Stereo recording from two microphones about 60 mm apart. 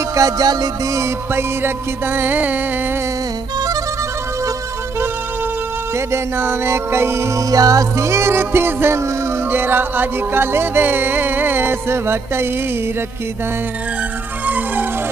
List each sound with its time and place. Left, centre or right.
0.1 s music: right
1.0 s music: right
5.9 s music: right
7.3 s music: right
8.0 s music: right
14.4 s music: right